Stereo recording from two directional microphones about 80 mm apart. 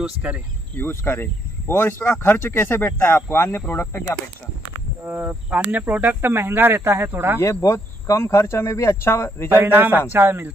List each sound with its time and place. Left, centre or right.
0.7 s speech: left
5.0 s speech: right
7.3 s speech: left
9.5 s speech: right